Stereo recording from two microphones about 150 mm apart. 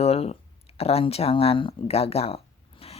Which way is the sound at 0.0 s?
45° left (ahead or behind).